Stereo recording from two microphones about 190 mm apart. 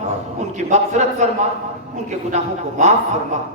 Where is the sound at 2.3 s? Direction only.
35° right (ahead or behind).